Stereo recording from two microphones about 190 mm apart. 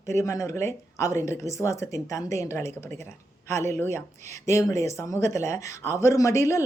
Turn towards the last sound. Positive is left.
turn(degrees=15)  # may be behind; listen again after turning